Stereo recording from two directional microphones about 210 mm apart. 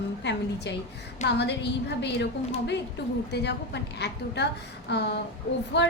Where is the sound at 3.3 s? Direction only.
50° left (ahead or behind).